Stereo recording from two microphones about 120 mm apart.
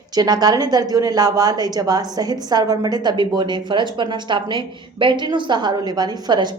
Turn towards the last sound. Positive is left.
turn(degrees=-35)  # may be behind; listen again after turning